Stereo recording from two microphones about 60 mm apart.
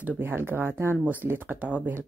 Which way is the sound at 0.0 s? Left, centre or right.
Right.